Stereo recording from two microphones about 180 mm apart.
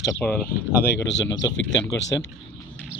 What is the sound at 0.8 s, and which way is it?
Speech, 75° left (ahead or behind).